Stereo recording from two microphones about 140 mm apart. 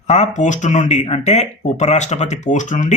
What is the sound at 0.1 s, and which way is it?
Speech, 60° left (ahead or behind).